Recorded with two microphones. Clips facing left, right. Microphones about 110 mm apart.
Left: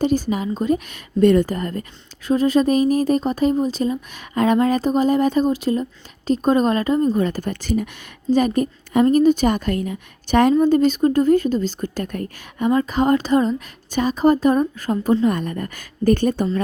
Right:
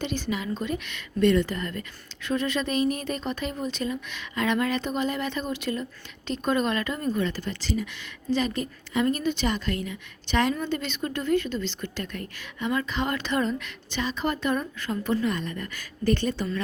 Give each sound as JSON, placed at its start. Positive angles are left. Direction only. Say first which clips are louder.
{"t": 0.0, "sound": "a woman's voice", "louder": "left 10 dB", "side_deg": 40}